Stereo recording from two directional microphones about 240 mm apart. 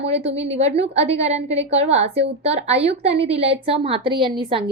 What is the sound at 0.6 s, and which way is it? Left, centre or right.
A woman's voice, right.